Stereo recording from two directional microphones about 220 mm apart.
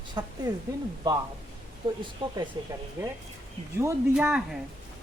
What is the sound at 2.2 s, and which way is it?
Speech, 20° right (ahead or behind).